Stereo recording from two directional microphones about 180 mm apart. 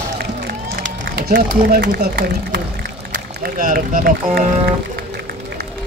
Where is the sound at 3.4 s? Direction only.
50° right (ahead or behind).